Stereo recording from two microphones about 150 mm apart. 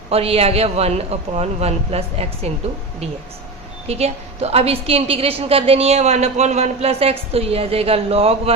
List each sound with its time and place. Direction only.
0.1 s a man's voice: 40° right (ahead or behind)
3.8 s a woman's voice: 45° right (ahead or behind)